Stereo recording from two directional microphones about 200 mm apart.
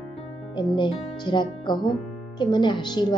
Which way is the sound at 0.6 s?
25° left (ahead or behind).